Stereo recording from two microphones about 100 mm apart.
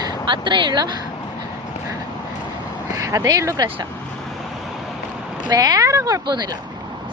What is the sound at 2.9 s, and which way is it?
Speech, 35° right (ahead or behind).